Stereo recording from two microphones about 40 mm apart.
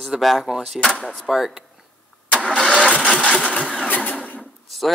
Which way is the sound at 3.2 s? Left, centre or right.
Left.